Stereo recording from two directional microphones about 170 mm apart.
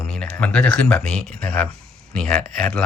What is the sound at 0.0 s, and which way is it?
Speech, 5° left (ahead or behind).